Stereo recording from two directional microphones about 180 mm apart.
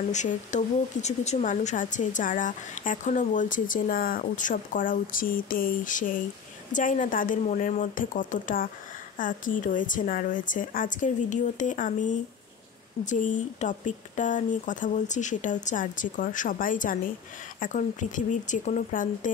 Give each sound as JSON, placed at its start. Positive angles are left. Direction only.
{"t": 0.1, "sound": "a woman's voice", "side_deg": 40}